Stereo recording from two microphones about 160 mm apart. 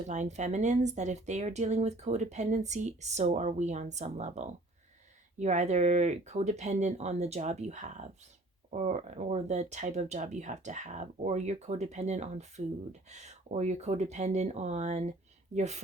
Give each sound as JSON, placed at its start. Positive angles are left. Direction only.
{"t": 0.1, "sound": "speech", "side_deg": -45}